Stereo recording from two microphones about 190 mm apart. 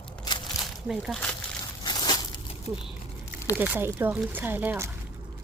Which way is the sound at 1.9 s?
20° left (ahead or behind).